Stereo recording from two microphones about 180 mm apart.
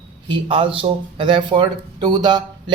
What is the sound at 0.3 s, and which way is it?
Speech, 30° right (ahead or behind).